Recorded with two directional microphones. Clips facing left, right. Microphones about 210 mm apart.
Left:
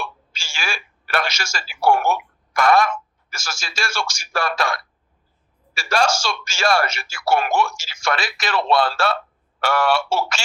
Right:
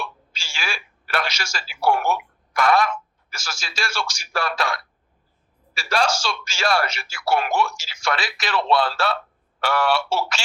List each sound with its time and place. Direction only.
0.0 s speech: 45° left (ahead or behind)